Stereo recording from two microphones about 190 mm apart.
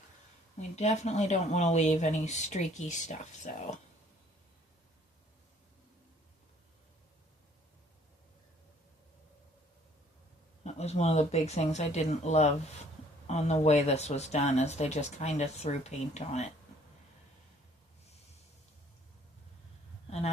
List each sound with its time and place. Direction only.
0.8 s speech: 35° left (ahead or behind)
10.6 s speech: 35° left (ahead or behind)
20.1 s speech: 35° left (ahead or behind)